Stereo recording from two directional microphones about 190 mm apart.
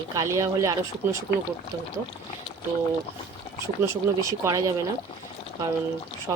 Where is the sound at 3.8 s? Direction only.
15° right (ahead or behind).